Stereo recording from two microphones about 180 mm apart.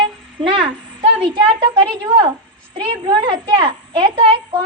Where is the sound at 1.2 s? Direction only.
30° right (ahead or behind).